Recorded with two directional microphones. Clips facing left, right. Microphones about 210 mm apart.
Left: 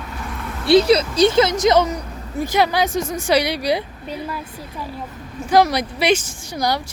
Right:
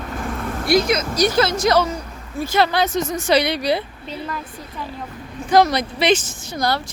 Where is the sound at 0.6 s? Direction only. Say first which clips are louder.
Left 5 dB; 30° left (ahead or behind); by 4.4 s 10° left (ahead or behind).